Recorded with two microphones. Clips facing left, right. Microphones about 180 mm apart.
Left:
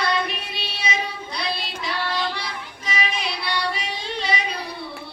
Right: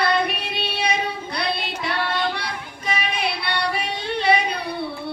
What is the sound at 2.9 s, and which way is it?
Yodeling, 60° right (ahead or behind).